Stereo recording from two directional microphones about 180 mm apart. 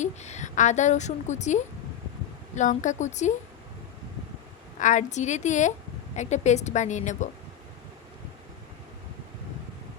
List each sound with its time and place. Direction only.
0.0 s a woman's voice: 40° left (ahead or behind)
4.8 s a woman's voice: 45° left (ahead or behind)